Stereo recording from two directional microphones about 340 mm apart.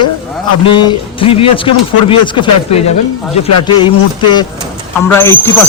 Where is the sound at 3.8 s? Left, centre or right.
Centre.